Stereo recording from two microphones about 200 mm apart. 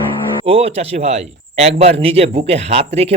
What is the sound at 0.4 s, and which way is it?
A man's voice, 30° right (ahead or behind).